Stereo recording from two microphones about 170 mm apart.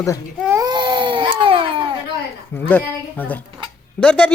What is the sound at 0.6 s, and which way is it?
Crying, 25° right (ahead or behind).